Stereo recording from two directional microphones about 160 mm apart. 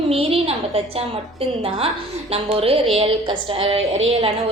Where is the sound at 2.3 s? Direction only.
40° right (ahead or behind).